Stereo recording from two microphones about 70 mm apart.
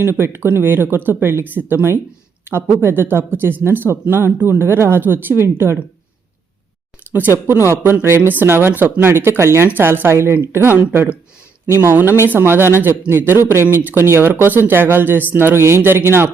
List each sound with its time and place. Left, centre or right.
0.0 s speech: right
7.1 s speech: right
11.7 s speech: right